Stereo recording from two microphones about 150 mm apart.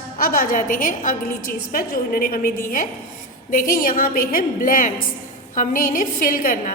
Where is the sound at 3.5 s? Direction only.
65° left (ahead or behind).